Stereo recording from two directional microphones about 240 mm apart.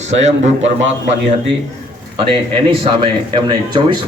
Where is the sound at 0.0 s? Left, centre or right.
Right.